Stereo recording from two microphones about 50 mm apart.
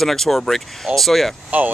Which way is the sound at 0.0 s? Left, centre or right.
Centre.